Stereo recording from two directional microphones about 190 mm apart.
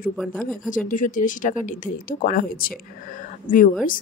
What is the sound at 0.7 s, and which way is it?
Speech, 45° left (ahead or behind).